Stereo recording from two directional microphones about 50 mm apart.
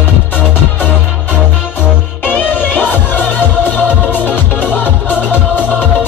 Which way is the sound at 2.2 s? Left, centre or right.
Left.